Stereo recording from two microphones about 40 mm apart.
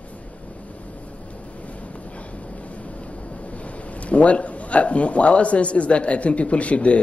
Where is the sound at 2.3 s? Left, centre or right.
Left.